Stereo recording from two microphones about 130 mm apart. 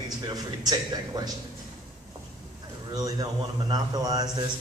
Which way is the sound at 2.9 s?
30° right (ahead or behind).